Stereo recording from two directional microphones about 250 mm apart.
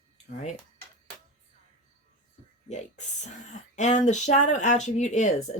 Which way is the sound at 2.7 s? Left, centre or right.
Left.